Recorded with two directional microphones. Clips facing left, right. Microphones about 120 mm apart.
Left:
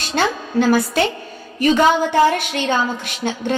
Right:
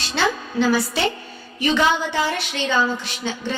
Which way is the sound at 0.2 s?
45° left (ahead or behind).